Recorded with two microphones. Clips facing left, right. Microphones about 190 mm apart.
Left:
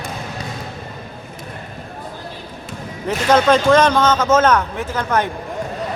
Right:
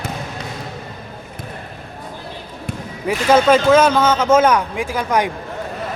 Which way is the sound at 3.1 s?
10° right (ahead or behind).